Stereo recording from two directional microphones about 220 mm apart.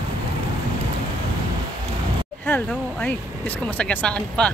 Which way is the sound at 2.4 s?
5° left (ahead or behind).